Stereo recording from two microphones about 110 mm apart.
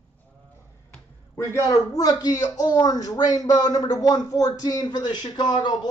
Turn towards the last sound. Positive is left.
turn(degrees=40)  # may be behind; listen again after turning